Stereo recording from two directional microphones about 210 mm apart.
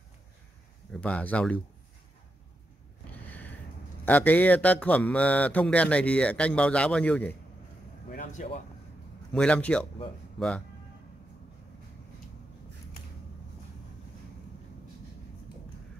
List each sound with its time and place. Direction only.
0.9 s speech: 5° left (ahead or behind)
4.0 s speech: 10° left (ahead or behind)
8.1 s a sound: 35° left (ahead or behind)
9.3 s speech: 5° left (ahead or behind)